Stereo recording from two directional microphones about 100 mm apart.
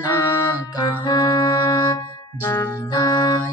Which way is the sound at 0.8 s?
40° left (ahead or behind).